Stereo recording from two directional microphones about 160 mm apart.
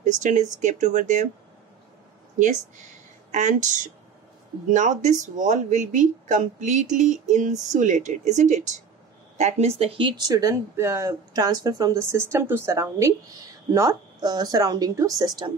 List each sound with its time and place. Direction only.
0.0 s speech: 50° right (ahead or behind)
2.3 s speech: 50° right (ahead or behind); by 15.5 s 25° right (ahead or behind)